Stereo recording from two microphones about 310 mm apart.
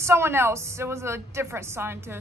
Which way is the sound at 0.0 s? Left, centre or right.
Centre.